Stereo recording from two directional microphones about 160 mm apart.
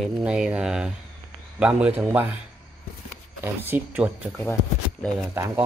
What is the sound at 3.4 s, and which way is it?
Speech, 10° right (ahead or behind).